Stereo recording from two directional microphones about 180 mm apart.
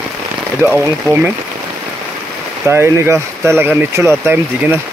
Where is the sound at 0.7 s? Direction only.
10° right (ahead or behind).